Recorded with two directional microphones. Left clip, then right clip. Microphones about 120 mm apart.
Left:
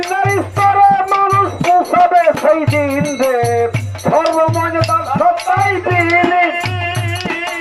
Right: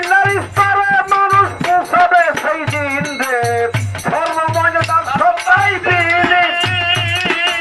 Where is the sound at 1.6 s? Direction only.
30° left (ahead or behind).